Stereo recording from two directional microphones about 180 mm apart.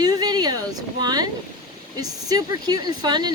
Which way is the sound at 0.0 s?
20° right (ahead or behind).